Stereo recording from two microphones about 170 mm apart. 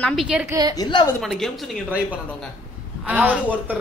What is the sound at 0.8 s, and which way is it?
Speech, 25° left (ahead or behind).